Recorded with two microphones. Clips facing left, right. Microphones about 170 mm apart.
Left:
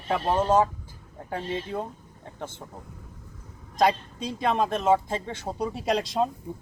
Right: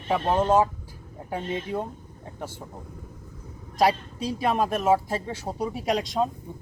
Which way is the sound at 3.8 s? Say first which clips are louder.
Right 1 dB; 10° right (ahead or behind).